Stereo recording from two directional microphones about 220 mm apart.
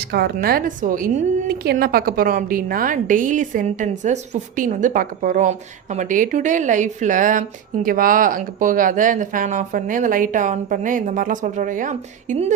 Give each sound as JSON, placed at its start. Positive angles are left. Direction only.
{"t": 0.0, "sound": "a woman's voice", "side_deg": -45}